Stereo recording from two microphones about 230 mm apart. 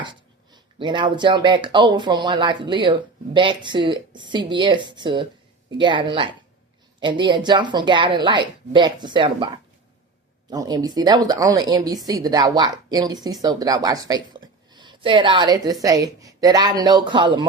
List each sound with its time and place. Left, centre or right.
0.0 s speech: centre
10.5 s a woman's voice: centre